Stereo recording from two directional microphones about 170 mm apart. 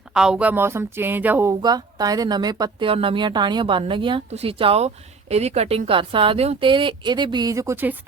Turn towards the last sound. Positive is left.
turn(degrees=-10)  # may be behind; listen again after turning